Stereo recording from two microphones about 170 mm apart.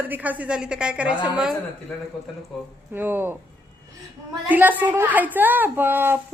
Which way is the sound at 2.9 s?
10° right (ahead or behind).